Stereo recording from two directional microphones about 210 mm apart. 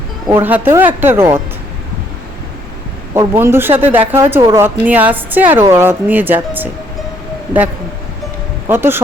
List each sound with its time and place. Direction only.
0.3 s speech: 10° right (ahead or behind)
3.2 s speech: 10° right (ahead or behind)
8.6 s speech: 10° right (ahead or behind)